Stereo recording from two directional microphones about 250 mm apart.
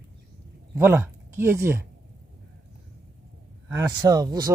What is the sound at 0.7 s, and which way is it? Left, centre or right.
Speech, centre.